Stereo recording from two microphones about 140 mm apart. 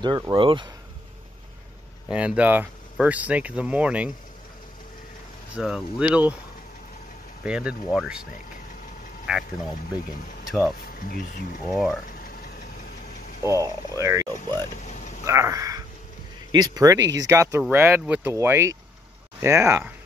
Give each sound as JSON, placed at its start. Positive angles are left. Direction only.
{"t": 0.0, "sound": "speech", "side_deg": -35}
{"t": 2.0, "sound": "speech", "side_deg": -10}
{"t": 5.6, "sound": "speech", "side_deg": -5}
{"t": 7.4, "sound": "speech", "side_deg": -5}
{"t": 11.0, "sound": "speech", "side_deg": 90}
{"t": 11.7, "sound": "speech", "side_deg": 0}
{"t": 13.4, "sound": "speech", "side_deg": -25}